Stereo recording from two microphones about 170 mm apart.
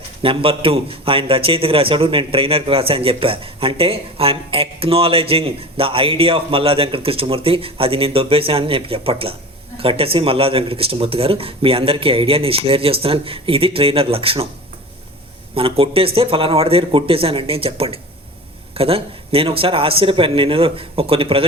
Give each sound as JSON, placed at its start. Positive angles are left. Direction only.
{"t": 0.2, "sound": "a man's voice", "side_deg": -30}
{"t": 15.5, "sound": "a man's voice", "side_deg": -35}